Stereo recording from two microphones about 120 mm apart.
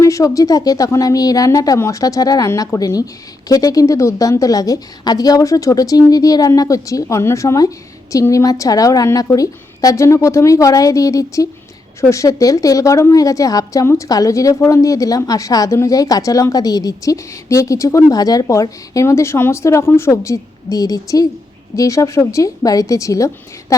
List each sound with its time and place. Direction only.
0.0 s a woman's voice: 25° left (ahead or behind)